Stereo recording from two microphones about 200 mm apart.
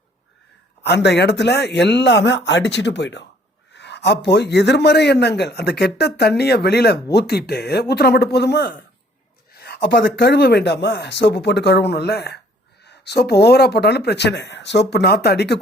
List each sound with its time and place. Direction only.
0.9 s speech: 60° left (ahead or behind)